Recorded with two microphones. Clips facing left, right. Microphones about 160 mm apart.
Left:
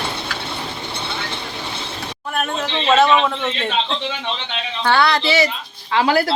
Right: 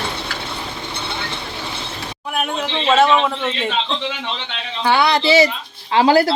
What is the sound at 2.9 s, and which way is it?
Bird, 10° right (ahead or behind).